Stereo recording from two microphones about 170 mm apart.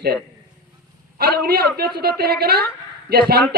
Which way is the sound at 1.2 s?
65° right (ahead or behind).